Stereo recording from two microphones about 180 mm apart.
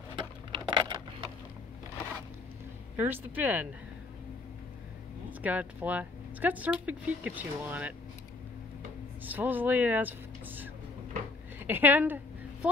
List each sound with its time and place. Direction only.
0.1 s a sound: 25° right (ahead or behind)
3.0 s speech: 10° right (ahead or behind)
5.4 s speech: 10° right (ahead or behind)
9.2 s speech: 10° right (ahead or behind)